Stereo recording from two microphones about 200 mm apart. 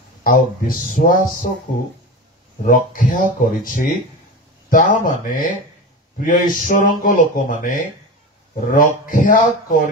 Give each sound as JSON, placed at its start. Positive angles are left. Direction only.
{"t": 0.2, "sound": "speech", "side_deg": 45}
{"t": 2.6, "sound": "speech", "side_deg": 40}